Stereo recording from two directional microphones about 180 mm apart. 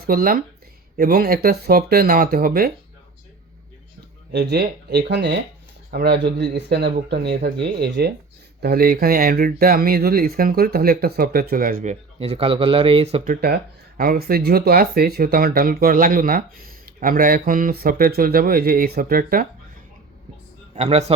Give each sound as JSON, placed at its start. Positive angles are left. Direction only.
{"t": 0.0, "sound": "speech", "side_deg": -55}
{"t": 4.3, "sound": "speech", "side_deg": -65}
{"t": 8.6, "sound": "speech", "side_deg": -55}
{"t": 13.2, "sound": "speech", "side_deg": -55}
{"t": 20.7, "sound": "a man's voice", "side_deg": -35}